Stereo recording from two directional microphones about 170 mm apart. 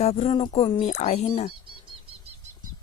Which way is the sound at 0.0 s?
35° left (ahead or behind).